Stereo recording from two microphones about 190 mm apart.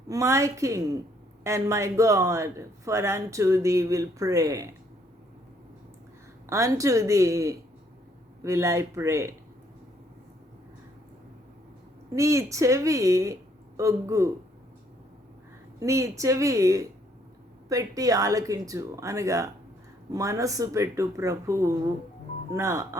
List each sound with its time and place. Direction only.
0.1 s speech: 15° right (ahead or behind)
6.5 s speech: 15° right (ahead or behind)
12.1 s speech: 15° right (ahead or behind)
15.8 s speech: 15° right (ahead or behind)